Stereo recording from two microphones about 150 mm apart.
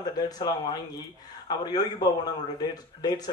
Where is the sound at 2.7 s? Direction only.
25° left (ahead or behind).